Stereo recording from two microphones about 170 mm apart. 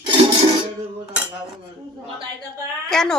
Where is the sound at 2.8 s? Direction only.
5° left (ahead or behind).